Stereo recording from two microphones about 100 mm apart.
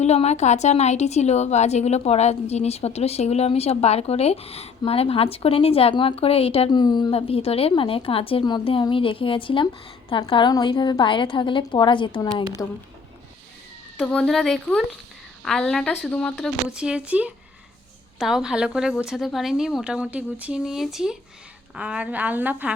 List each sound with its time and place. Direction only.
0.0 s a woman's voice: 90° left
4.9 s a woman's voice: 75° left (ahead or behind)
5.9 s a woman's voice: 60° left (ahead or behind); by 6.7 s 80° left
6.7 s a woman's voice: 50° left (ahead or behind)
7.1 s a woman's voice: 75° left (ahead or behind)
8.4 s speech: 55° left (ahead or behind)
10.2 s a woman's voice: 45° left (ahead or behind)
14.0 s a woman's voice: 10° left (ahead or behind)
16.6 s a woman's voice: 10° right (ahead or behind)